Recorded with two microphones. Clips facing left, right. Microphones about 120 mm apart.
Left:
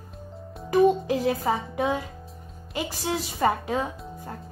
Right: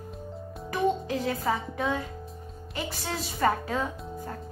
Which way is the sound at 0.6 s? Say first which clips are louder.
Left 7 dB; 25° left (ahead or behind).